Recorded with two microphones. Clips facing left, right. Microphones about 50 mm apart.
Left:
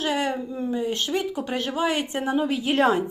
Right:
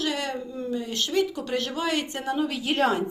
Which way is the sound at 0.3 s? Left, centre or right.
Centre.